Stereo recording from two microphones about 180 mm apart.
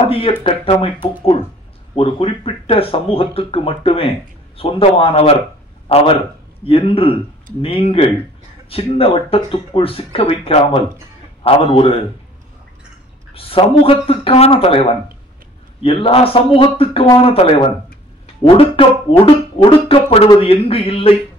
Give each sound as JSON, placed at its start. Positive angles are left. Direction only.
{"t": 0.1, "sound": "speech", "side_deg": 30}
{"t": 2.0, "sound": "a man's voice", "side_deg": 30}
{"t": 13.3, "sound": "speech", "side_deg": 30}